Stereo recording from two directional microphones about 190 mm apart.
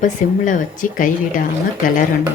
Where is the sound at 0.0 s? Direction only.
45° left (ahead or behind).